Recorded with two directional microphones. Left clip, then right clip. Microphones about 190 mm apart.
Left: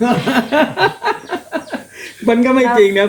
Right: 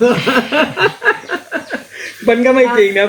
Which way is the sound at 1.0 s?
50° left (ahead or behind).